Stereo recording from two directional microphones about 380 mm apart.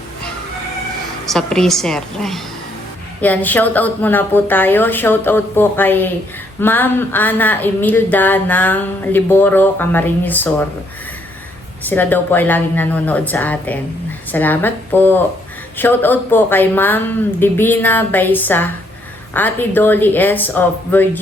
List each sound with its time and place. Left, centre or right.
1.3 s speech: centre
11.8 s speech: centre